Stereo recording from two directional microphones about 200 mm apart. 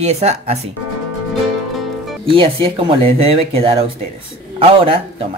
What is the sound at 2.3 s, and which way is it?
Speech, 25° right (ahead or behind).